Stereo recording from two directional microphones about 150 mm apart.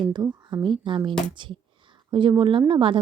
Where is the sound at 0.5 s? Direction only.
30° right (ahead or behind).